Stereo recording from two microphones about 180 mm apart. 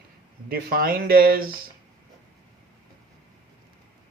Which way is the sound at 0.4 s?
55° right (ahead or behind).